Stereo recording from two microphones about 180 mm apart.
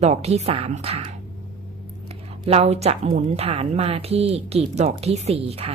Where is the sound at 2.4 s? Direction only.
35° right (ahead or behind).